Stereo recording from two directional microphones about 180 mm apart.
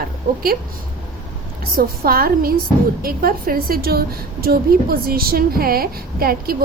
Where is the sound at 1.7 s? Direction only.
55° right (ahead or behind).